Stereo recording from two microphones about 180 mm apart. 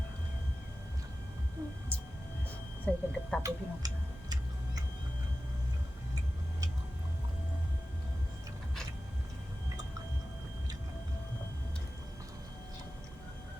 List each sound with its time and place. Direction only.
1.9 s a sound: 10° left (ahead or behind)
2.8 s speech: 5° left (ahead or behind)
3.4 s tick-tock: 20° right (ahead or behind)